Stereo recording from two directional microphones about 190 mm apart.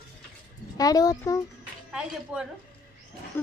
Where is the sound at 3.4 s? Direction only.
10° left (ahead or behind).